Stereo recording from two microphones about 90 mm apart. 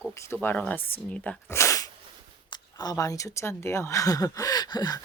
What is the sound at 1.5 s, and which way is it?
Speech, 35° left (ahead or behind).